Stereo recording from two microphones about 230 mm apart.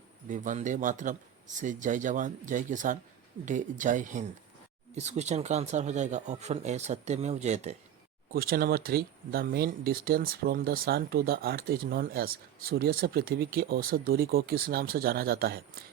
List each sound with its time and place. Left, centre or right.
0.3 s speech: right
8.3 s speech: right